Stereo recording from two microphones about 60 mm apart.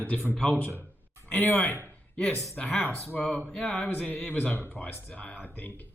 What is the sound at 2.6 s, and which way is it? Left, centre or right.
Speech, left.